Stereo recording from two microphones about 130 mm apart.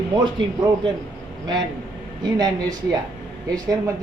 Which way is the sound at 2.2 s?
30° right (ahead or behind).